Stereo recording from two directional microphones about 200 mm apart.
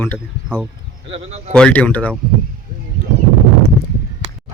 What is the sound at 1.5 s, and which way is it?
Speech, 5° left (ahead or behind).